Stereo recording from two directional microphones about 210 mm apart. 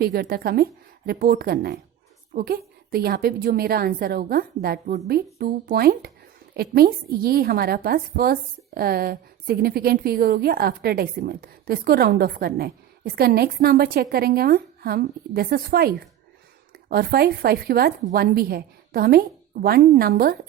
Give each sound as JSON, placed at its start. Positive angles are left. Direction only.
{"t": 0.0, "sound": "a woman's voice", "side_deg": -45}